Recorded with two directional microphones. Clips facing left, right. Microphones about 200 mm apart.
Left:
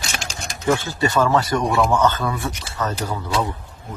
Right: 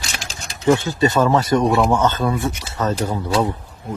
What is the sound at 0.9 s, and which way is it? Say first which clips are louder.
Speech: right 2 dB; 20° right (ahead or behind).